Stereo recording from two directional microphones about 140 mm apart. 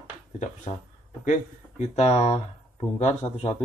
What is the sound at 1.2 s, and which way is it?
Speech, 60° left (ahead or behind).